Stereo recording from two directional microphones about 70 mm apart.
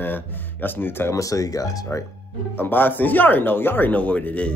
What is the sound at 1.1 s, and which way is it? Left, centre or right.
Speech, left.